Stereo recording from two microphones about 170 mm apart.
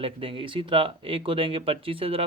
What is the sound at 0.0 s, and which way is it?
Speech, 30° right (ahead or behind).